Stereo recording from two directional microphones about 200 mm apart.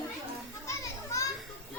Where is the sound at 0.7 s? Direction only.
15° left (ahead or behind).